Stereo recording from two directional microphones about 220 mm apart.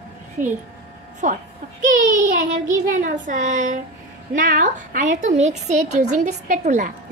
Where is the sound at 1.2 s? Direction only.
35° right (ahead or behind).